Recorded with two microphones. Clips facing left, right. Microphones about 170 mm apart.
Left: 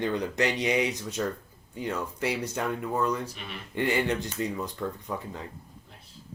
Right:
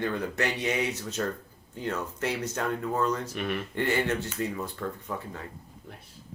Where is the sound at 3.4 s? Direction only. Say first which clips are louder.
Right 11 dB; 60° right (ahead or behind).